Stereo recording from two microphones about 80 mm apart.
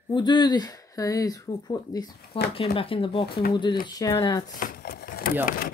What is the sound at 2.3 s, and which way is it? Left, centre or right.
Speech, left.